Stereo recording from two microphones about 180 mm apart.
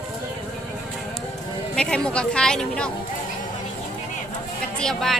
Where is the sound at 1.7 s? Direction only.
5° left (ahead or behind).